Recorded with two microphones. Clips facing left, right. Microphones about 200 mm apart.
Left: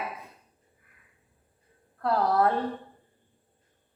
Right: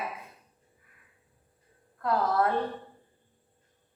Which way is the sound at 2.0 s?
35° left (ahead or behind).